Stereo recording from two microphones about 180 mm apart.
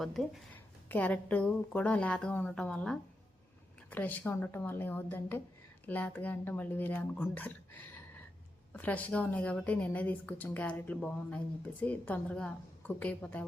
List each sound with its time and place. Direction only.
0.0 s a woman's voice: centre (ahead or behind)